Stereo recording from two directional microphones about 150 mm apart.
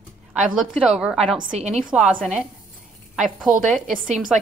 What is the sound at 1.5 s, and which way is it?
Speech, 45° right (ahead or behind).